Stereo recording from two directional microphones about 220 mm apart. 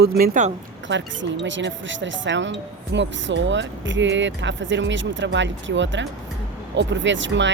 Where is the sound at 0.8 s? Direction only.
55° right (ahead or behind).